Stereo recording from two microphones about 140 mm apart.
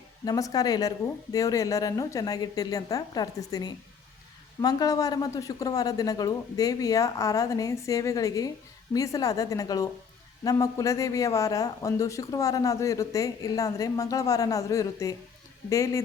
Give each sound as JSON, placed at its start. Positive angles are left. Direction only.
{"t": 0.3, "sound": "speech", "side_deg": 25}